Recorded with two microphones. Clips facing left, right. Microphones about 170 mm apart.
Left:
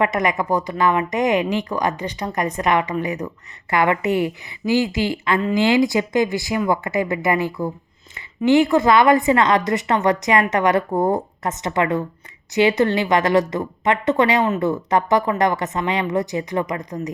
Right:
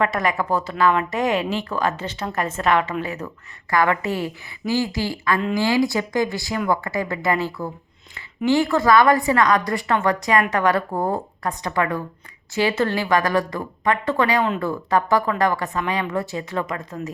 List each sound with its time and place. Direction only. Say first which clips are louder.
0.0 s a woman's voice: left 2 dB; 20° left (ahead or behind)